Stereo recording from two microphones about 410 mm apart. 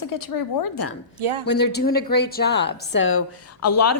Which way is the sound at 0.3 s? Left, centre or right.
Left.